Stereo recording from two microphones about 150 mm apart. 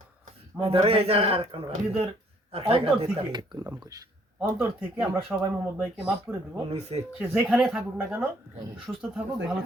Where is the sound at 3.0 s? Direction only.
30° right (ahead or behind).